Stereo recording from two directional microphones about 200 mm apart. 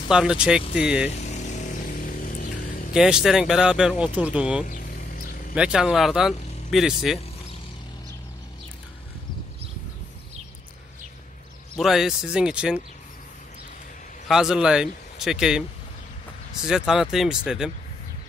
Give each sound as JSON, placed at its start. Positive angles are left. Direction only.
{"t": 0.1, "sound": "speech", "side_deg": -5}
{"t": 1.1, "sound": "vehicle", "side_deg": 35}
{"t": 2.9, "sound": "speech", "side_deg": -5}
{"t": 4.6, "sound": "vehicle", "side_deg": 40}
{"t": 5.5, "sound": "speech", "side_deg": -5}
{"t": 11.7, "sound": "speech", "side_deg": 0}
{"t": 14.2, "sound": "speech", "side_deg": 0}
{"t": 16.6, "sound": "speech", "side_deg": -5}